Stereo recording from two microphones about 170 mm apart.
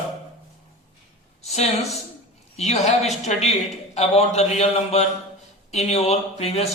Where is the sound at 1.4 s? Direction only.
40° left (ahead or behind).